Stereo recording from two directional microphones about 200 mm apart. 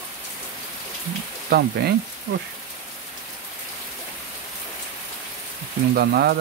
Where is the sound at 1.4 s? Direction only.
50° right (ahead or behind).